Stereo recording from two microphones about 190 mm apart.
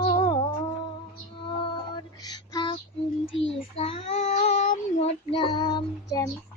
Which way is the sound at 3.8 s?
30° left (ahead or behind).